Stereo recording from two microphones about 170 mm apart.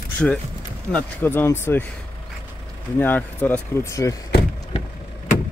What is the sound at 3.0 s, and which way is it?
Speech, 10° left (ahead or behind).